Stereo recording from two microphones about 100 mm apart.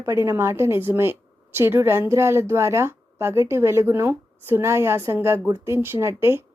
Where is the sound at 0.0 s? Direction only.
25° right (ahead or behind).